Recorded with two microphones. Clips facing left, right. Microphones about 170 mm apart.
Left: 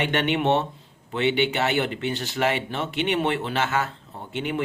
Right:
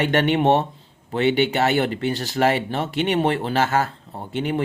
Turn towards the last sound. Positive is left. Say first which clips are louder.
# right 4 dB
turn(degrees=-35)  # may be behind; listen again after turning